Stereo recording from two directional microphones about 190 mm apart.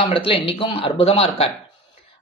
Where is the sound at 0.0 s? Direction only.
25° left (ahead or behind).